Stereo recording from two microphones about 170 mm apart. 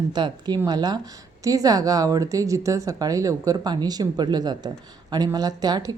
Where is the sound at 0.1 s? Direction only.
25° right (ahead or behind).